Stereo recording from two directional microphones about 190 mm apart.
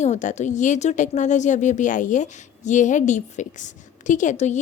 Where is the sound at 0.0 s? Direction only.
40° left (ahead or behind).